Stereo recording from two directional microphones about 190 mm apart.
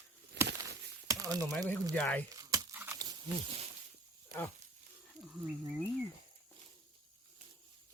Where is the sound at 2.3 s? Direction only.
20° right (ahead or behind).